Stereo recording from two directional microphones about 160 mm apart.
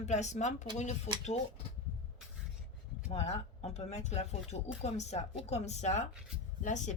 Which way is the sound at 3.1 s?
40° left (ahead or behind).